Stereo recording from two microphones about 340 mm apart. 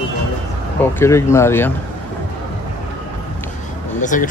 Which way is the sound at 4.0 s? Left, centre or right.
Left.